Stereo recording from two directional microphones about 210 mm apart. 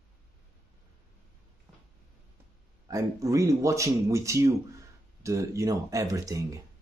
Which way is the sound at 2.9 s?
15° right (ahead or behind).